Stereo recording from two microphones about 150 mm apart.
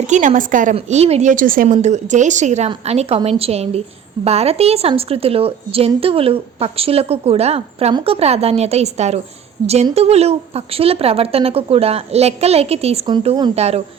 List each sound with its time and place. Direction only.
0.1 s a woman's voice: 55° right (ahead or behind)
1.6 s a woman's voice: 50° right (ahead or behind)
13.1 s speech: 30° right (ahead or behind)
13.6 s a woman's voice: 45° right (ahead or behind)